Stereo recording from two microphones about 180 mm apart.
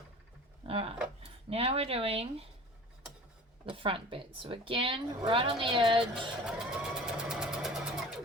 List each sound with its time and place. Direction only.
0.6 s a sound: 30° right (ahead or behind)
1.2 s speech: 35° right (ahead or behind)
3.7 s a woman's voice: 30° right (ahead or behind)
6.4 s sewing machine: 5° right (ahead or behind)